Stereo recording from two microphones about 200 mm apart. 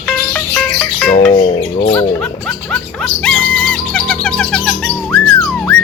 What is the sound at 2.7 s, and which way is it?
Bird, 5° left (ahead or behind).